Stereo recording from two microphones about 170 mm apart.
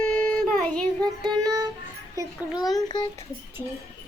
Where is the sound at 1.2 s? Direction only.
20° right (ahead or behind).